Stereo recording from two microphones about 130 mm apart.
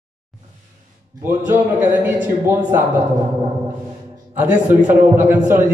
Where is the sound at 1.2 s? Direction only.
15° right (ahead or behind).